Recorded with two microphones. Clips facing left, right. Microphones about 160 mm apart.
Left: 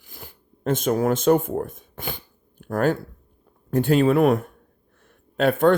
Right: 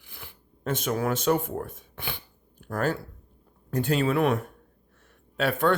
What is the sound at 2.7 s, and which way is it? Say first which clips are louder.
Speech: left 6 dB; 55° left (ahead or behind).